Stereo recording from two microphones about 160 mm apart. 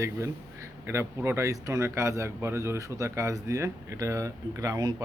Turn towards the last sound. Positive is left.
turn(degrees=-20)  # may be behind; listen again after turning